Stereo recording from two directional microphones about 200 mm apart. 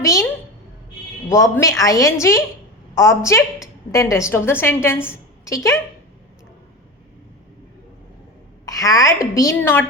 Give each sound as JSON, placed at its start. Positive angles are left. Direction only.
{"t": 0.0, "sound": "a woman's voice", "side_deg": 15}
{"t": 1.3, "sound": "a woman's voice", "side_deg": 15}
{"t": 8.6, "sound": "a woman's voice", "side_deg": 15}